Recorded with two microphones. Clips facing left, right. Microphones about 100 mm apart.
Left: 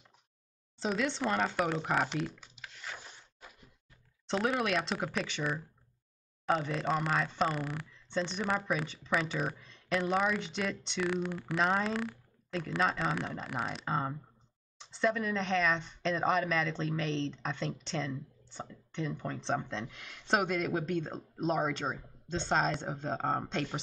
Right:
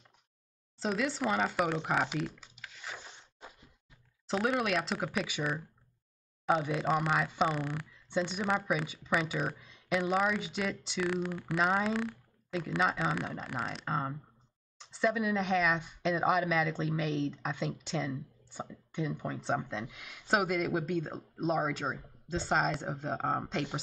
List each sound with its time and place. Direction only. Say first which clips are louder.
0.7 s speech: even; centre (ahead or behind)
3.1 s a sound: right 2 dB; 20° right (ahead or behind)
4.3 s speech: even; centre (ahead or behind)